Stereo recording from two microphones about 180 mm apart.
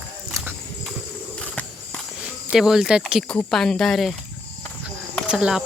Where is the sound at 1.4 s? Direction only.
5° left (ahead or behind).